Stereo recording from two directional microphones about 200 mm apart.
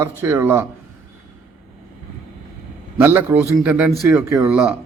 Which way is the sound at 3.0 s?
10° right (ahead or behind).